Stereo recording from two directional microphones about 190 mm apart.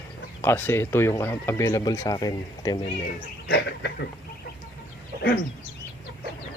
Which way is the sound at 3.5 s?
65° left (ahead or behind).